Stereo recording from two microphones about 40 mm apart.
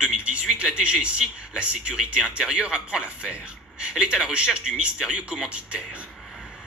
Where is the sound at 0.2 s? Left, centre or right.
Right.